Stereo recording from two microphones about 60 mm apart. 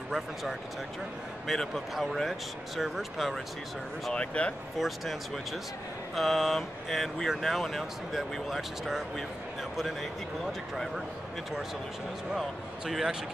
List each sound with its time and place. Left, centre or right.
0.1 s speech: centre
4.1 s speech: centre
4.7 s speech: centre
12.8 s speech: centre